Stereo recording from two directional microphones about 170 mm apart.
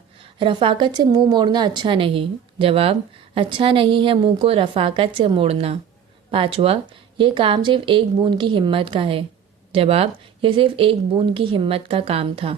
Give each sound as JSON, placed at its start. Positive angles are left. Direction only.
{"t": 0.3, "sound": "a woman's voice", "side_deg": -30}